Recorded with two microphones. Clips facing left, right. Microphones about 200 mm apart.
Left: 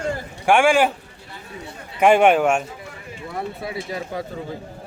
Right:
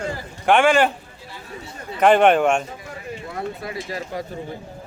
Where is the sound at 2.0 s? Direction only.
10° left (ahead or behind).